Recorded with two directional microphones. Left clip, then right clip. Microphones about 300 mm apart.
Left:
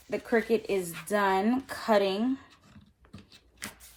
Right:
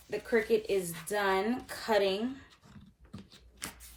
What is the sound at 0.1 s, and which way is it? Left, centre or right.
A woman's voice, left.